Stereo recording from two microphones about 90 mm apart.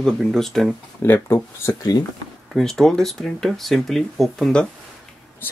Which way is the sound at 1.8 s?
45° left (ahead or behind).